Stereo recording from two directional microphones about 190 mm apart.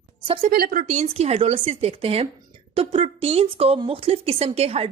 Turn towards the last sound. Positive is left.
turn(degrees=-30)  # may be behind; listen again after turning